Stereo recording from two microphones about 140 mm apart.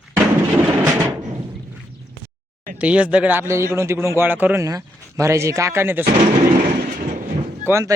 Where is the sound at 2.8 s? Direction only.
10° right (ahead or behind).